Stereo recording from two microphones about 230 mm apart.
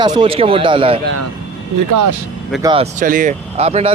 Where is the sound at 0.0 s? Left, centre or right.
Centre.